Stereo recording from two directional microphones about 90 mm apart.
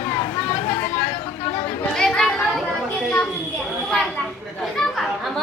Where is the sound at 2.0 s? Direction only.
5° left (ahead or behind).